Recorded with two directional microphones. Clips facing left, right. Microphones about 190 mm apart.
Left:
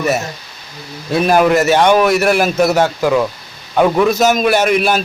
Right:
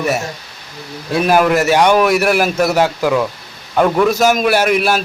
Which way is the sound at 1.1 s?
5° right (ahead or behind).